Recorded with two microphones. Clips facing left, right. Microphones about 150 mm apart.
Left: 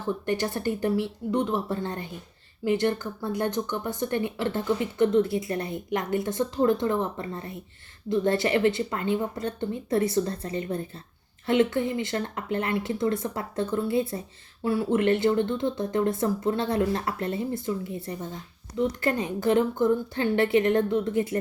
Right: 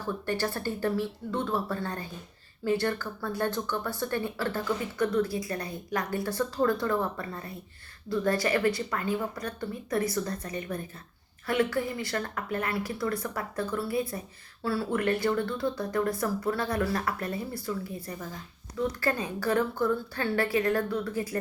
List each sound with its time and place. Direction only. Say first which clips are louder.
0.0 s speech: left 3 dB; 20° left (ahead or behind)